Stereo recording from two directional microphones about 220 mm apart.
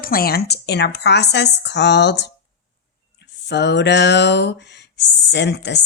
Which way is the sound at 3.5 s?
50° left (ahead or behind).